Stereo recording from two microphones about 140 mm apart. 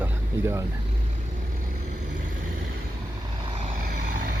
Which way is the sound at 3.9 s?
80° right.